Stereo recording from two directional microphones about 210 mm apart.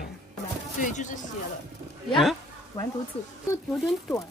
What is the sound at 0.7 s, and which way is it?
Speech, 35° left (ahead or behind).